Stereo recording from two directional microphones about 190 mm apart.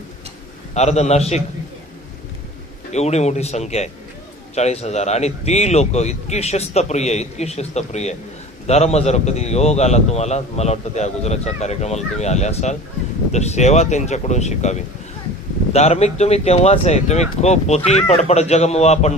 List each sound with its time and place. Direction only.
0.7 s a man's voice: 35° left (ahead or behind)
2.9 s a man's voice: 35° left (ahead or behind)